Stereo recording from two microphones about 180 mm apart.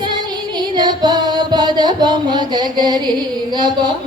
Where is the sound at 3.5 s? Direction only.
25° right (ahead or behind).